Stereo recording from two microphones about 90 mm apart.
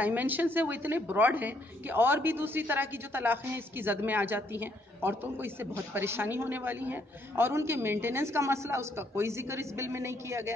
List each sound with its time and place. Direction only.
0.0 s a woman's voice: 20° right (ahead or behind)